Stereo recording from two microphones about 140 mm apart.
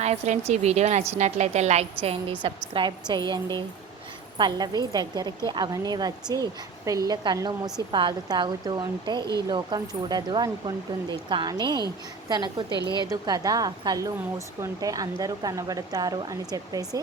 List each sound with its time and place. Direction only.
0.0 s a woman's voice: 50° right (ahead or behind)
2.0 s speech: 40° right (ahead or behind)